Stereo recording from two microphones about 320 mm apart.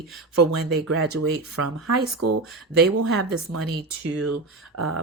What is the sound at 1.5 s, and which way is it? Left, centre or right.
Speech, right.